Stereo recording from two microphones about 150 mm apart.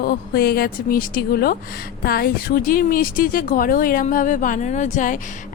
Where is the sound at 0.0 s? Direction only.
90° left.